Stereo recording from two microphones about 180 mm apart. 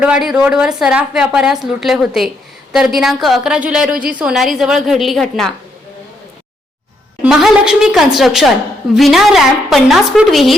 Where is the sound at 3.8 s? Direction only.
50° right (ahead or behind).